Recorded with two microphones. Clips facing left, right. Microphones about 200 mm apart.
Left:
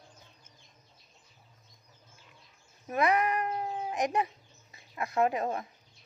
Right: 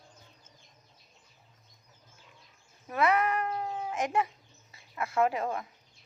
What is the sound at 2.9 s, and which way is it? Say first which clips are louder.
Babbling: even; 15° left (ahead or behind).